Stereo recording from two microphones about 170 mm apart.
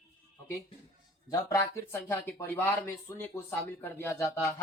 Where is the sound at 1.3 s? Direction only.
20° left (ahead or behind).